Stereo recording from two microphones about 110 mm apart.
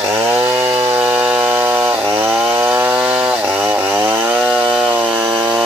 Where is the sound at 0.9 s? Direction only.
10° right (ahead or behind).